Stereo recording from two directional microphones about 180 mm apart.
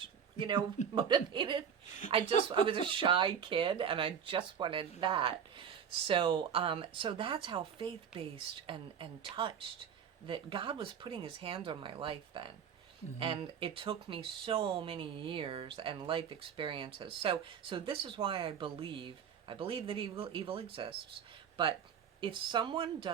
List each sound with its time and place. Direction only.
0.3 s speech: 25° right (ahead or behind)
22.2 s speech: 25° right (ahead or behind)